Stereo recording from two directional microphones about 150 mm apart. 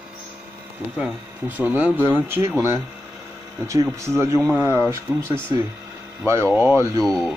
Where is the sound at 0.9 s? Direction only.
10° right (ahead or behind).